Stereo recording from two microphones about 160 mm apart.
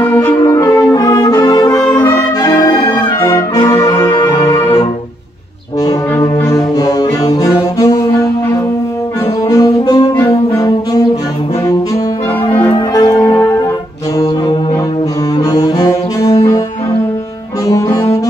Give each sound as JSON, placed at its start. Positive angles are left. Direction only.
{"t": 0.0, "sound": "music", "side_deg": 10}
{"t": 0.4, "sound": "brass instrument", "side_deg": 20}
{"t": 6.1, "sound": "brass instrument", "side_deg": 20}
{"t": 9.5, "sound": "saxophone", "side_deg": 25}
{"t": 12.7, "sound": "music", "side_deg": 25}
{"t": 13.2, "sound": "music", "side_deg": 15}
{"t": 15.5, "sound": "saxophone", "side_deg": 25}
{"t": 17.6, "sound": "saxophone", "side_deg": 20}